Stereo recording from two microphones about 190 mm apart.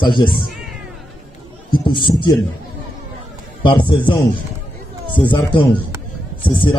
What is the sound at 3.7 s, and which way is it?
A man's voice, 25° left (ahead or behind).